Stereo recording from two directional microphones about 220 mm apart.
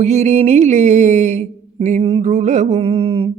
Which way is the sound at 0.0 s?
30° right (ahead or behind).